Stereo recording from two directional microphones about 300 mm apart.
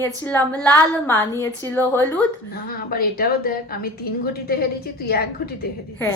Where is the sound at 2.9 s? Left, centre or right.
Left.